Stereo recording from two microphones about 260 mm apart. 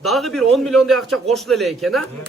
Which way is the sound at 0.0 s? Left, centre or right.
Centre.